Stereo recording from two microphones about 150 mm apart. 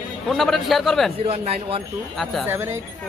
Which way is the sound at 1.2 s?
40° right (ahead or behind).